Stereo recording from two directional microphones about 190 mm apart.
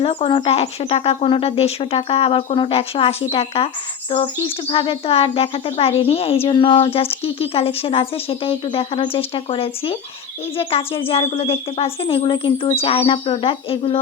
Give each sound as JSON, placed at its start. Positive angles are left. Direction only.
{"t": 0.0, "sound": "speech", "side_deg": 30}
{"t": 4.1, "sound": "insect", "side_deg": 30}